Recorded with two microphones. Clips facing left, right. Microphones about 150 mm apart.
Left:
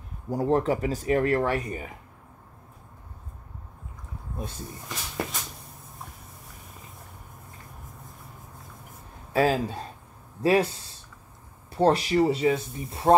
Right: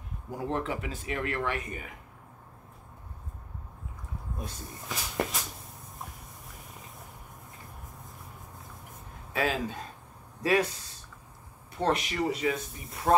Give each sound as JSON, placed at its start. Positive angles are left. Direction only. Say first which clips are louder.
{"t": 0.3, "sound": "speech", "louder": "left 8 dB", "side_deg": 40}
{"t": 4.8, "sound": "a sound", "louder": "right 2 dB", "side_deg": 0}
{"t": 9.3, "sound": "speech", "louder": "left 7 dB", "side_deg": 35}